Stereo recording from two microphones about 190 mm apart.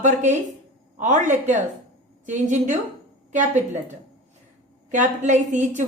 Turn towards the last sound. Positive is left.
turn(degrees=-40)  # may be behind; listen again after turning